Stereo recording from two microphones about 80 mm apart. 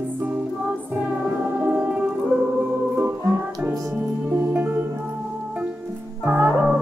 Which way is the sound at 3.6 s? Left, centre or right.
Right.